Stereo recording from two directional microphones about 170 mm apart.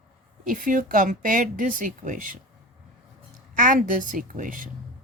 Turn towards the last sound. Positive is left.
turn(degrees=-55)  # may be behind; listen again after turning